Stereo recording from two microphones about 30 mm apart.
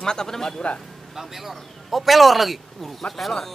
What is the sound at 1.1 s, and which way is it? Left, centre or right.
Speech, centre.